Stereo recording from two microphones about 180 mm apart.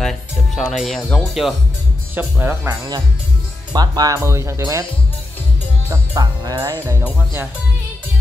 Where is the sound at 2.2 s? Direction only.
10° right (ahead or behind).